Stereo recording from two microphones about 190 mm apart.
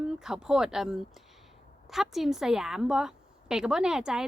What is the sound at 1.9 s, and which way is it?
Speech, centre (ahead or behind).